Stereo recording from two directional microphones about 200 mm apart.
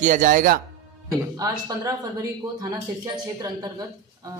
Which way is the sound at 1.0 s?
15° right (ahead or behind).